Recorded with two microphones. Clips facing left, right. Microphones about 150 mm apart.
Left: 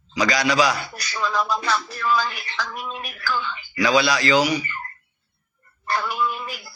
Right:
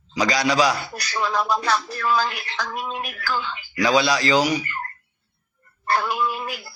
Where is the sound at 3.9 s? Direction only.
30° right (ahead or behind).